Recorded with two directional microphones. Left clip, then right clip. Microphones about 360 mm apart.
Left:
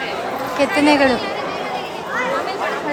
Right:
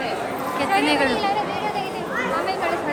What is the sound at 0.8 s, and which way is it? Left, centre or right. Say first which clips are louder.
Speech: left 7 dB; centre.